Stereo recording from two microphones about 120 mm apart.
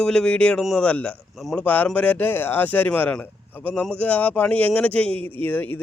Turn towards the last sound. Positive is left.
turn(degrees=15)  # may be behind; listen again after turning